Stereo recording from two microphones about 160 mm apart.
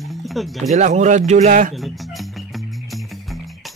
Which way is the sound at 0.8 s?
50° right (ahead or behind).